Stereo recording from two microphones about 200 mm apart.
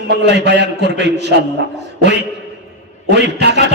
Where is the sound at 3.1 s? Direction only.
60° right (ahead or behind).